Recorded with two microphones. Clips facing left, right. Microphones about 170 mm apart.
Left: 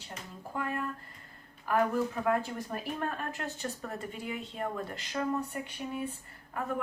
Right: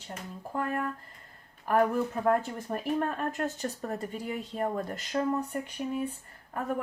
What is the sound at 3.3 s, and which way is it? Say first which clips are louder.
Speech: right 5 dB; 45° right (ahead or behind).